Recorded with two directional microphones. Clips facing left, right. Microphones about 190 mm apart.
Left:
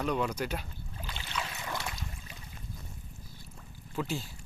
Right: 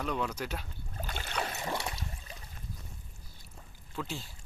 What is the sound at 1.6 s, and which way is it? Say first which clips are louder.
Boat: right 2 dB; 30° right (ahead or behind).